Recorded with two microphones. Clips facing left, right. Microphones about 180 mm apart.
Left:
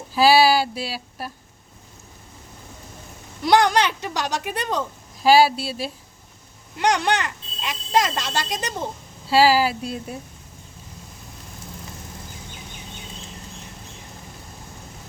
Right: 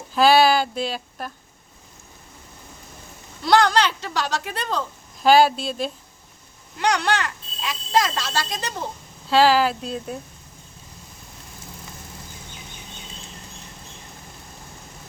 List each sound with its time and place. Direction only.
0.1 s speech: 5° left (ahead or behind)
3.4 s speech: 20° left (ahead or behind)
6.7 s speech: 20° left (ahead or behind)